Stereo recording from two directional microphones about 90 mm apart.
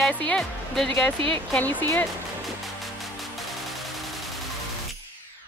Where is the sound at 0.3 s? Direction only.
10° left (ahead or behind).